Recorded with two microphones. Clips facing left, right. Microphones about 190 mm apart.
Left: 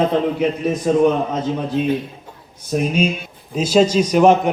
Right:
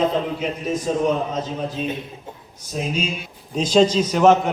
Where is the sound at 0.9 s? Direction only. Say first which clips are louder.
Left 7 dB; 60° left (ahead or behind).